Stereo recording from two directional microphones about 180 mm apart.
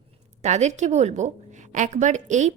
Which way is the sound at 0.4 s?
40° right (ahead or behind).